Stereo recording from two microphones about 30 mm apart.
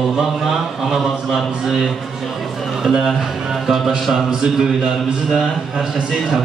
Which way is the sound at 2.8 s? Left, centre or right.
Centre.